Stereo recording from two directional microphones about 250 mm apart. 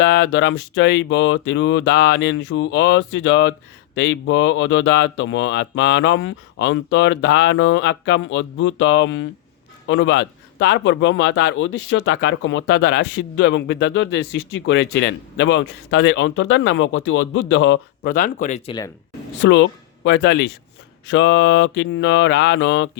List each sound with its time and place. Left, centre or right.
0.0 s a man's voice: left
18.1 s speech: left
19.4 s a man's voice: left